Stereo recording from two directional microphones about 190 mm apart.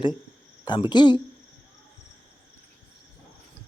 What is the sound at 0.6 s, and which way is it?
Speech, 25° left (ahead or behind).